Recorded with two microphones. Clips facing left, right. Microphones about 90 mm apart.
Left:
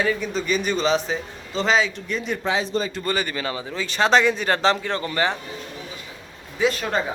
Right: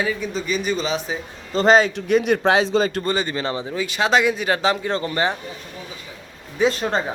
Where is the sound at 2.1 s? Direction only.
70° right (ahead or behind).